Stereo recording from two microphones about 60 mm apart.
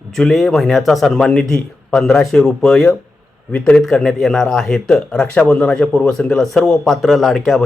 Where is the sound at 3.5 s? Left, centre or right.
Left.